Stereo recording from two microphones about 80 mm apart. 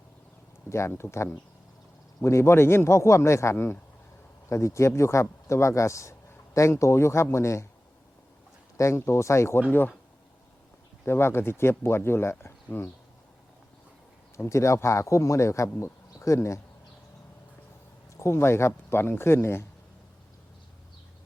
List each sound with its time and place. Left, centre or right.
0.7 s speech: left
8.8 s speech: left
11.0 s speech: left
14.3 s speech: left
18.2 s speech: left